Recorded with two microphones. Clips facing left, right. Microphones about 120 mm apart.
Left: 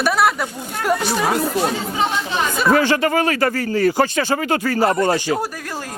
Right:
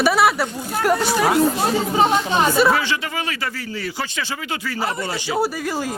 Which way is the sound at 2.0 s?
35° right (ahead or behind).